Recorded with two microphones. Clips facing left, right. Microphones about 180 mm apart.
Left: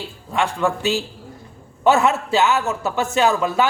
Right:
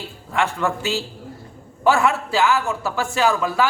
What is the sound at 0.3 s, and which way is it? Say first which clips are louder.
A man's voice: left 1 dB; 15° left (ahead or behind).